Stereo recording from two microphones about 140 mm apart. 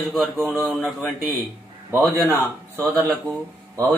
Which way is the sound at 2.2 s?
15° right (ahead or behind).